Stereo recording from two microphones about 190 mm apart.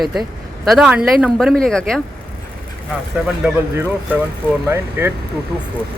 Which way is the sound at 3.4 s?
10° right (ahead or behind).